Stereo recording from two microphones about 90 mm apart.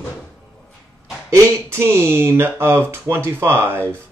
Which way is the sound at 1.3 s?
30° right (ahead or behind).